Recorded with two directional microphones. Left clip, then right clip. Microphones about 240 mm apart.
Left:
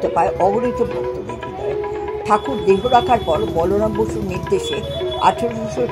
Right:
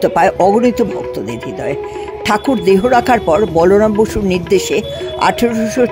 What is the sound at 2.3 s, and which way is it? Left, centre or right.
Speech, right.